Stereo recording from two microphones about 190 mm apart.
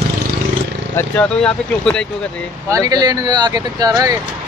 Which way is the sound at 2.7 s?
20° right (ahead or behind).